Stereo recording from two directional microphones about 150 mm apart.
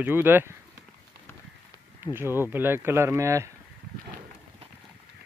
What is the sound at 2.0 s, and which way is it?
Speech, 15° right (ahead or behind).